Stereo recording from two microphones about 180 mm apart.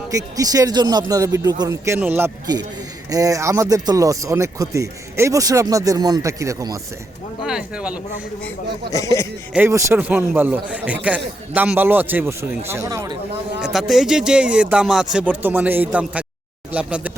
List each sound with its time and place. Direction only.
0.1 s speech: 20° right (ahead or behind)
7.4 s speech: 5° right (ahead or behind)
8.9 s speech: 20° left (ahead or behind)
9.5 s a man's voice: 10° right (ahead or behind)
13.6 s a man's voice: centre (ahead or behind)